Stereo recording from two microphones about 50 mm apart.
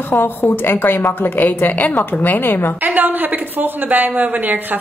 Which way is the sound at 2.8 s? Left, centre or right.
Right.